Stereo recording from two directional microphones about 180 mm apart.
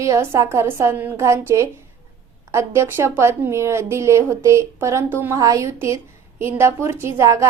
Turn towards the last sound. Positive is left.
turn(degrees=-15)  # may be behind; listen again after turning